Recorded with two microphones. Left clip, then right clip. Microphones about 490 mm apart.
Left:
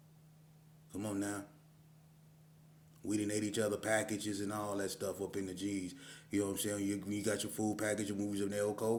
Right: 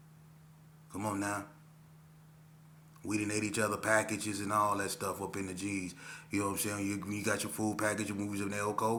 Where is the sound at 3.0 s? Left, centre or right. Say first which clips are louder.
Right 2 dB; left.